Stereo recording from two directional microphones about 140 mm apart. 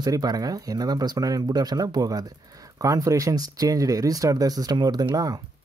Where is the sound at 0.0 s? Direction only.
25° right (ahead or behind).